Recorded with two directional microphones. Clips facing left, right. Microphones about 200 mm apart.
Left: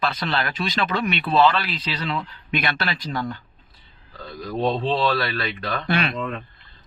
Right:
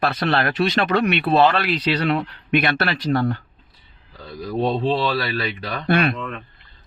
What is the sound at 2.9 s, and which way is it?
Speech, 65° right (ahead or behind).